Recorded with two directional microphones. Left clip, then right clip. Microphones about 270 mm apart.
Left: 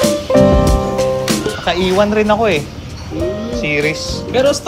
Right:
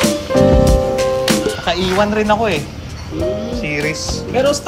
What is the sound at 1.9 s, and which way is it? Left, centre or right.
Speech, centre.